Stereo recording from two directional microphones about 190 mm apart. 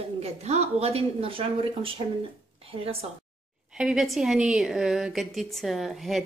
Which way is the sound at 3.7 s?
5° right (ahead or behind).